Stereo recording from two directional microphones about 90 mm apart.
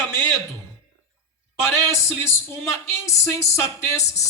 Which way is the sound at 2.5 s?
30° left (ahead or behind).